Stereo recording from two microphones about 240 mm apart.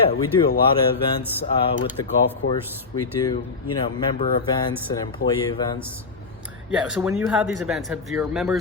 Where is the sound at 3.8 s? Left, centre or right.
Left.